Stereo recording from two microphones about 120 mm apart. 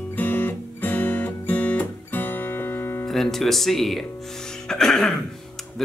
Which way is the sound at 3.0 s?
Centre (ahead or behind).